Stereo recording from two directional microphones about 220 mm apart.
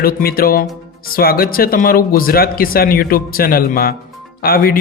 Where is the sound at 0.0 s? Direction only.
45° left (ahead or behind).